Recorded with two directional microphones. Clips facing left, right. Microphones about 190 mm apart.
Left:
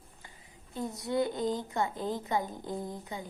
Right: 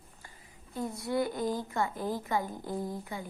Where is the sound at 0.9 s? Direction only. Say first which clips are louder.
Left 1 dB; 20° left (ahead or behind).